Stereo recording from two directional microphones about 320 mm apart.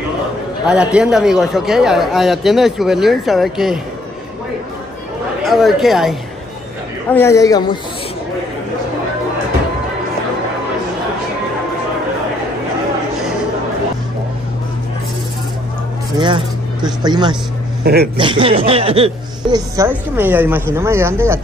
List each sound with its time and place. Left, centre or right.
0.7 s speech: centre
5.4 s a man's voice: centre
16.2 s speech: centre
17.8 s speech: right
18.1 s speech: centre